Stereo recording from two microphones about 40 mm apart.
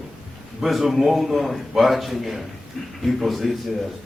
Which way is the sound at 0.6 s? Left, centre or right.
Centre.